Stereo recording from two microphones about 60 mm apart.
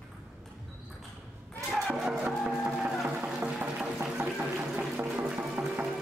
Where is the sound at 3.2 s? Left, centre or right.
Centre.